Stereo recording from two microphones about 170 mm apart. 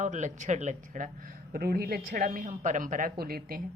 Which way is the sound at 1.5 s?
65° right (ahead or behind).